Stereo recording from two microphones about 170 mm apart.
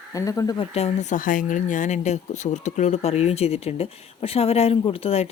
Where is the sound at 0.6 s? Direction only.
40° left (ahead or behind).